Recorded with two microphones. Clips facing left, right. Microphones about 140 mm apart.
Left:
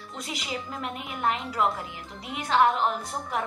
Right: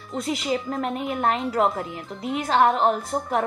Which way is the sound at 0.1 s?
35° right (ahead or behind).